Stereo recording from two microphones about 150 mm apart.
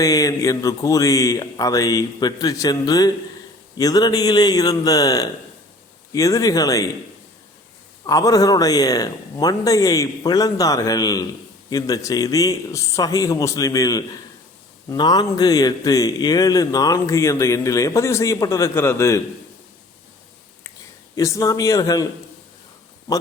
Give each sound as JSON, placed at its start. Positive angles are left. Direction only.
{"t": 0.0, "sound": "a man's voice", "side_deg": 20}
{"t": 8.0, "sound": "a man's voice", "side_deg": 25}
{"t": 21.2, "sound": "a man's voice", "side_deg": 20}